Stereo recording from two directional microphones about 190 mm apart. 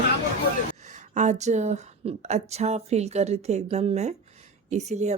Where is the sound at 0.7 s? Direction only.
40° right (ahead or behind).